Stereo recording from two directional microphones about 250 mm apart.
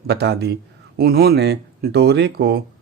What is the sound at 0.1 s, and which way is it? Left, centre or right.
Speech, right.